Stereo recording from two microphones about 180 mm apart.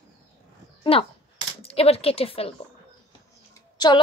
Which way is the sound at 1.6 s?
35° left (ahead or behind).